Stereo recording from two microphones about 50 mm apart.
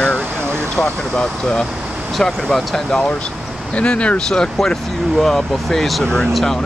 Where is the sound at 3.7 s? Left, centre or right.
Left.